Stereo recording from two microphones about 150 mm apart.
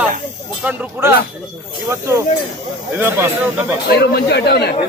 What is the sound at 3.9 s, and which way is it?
Speech, 90° left.